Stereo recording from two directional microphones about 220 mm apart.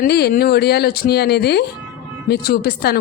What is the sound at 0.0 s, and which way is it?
A woman's voice, 45° left (ahead or behind).